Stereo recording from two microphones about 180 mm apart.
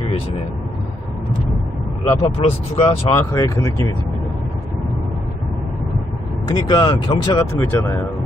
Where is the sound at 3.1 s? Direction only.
15° left (ahead or behind).